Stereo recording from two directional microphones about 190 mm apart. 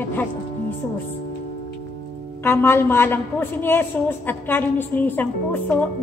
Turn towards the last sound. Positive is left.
turn(degrees=10)  # may be behind; listen again after turning